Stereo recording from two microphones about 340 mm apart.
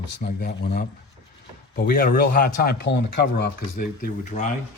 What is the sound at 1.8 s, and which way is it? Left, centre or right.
Speech, left.